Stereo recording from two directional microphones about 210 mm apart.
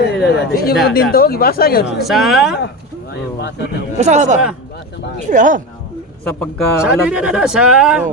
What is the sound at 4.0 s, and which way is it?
Speech, 35° right (ahead or behind).